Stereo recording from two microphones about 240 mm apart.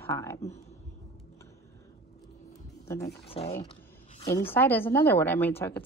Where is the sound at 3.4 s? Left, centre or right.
Left.